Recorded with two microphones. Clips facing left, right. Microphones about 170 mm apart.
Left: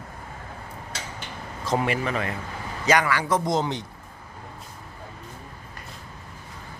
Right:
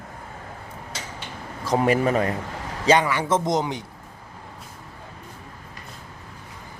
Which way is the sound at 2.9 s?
25° right (ahead or behind).